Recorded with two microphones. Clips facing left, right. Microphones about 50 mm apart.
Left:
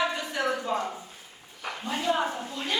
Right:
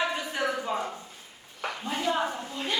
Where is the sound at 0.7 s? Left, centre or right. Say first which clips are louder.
Left 2 dB; centre.